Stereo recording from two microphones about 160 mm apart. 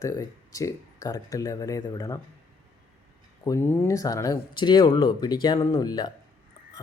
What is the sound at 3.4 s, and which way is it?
Speech, 20° left (ahead or behind).